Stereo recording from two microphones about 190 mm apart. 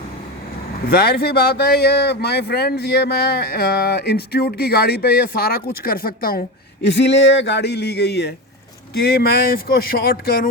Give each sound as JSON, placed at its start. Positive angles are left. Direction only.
{"t": 0.9, "sound": "speech", "side_deg": 55}
{"t": 6.8, "sound": "speech", "side_deg": 70}